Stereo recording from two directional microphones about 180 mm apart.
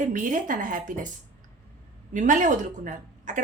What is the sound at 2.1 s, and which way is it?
Speech, 45° right (ahead or behind).